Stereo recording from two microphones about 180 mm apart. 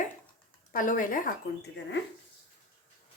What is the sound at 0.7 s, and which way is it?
Speech, 50° left (ahead or behind).